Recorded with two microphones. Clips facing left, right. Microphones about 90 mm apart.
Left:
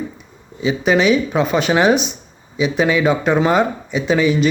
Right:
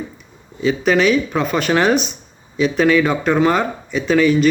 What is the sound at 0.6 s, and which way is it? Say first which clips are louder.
Speech: even; 15° left (ahead or behind).